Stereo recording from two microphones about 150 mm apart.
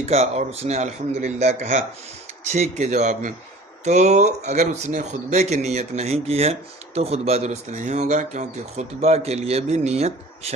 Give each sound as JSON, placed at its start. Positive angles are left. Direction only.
{"t": 0.0, "sound": "speech", "side_deg": -45}